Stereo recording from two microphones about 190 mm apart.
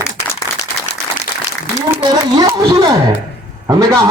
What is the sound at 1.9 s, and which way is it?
A man's voice, 20° right (ahead or behind).